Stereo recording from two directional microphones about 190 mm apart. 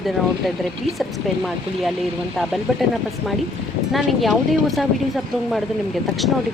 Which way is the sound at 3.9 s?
Centre (ahead or behind).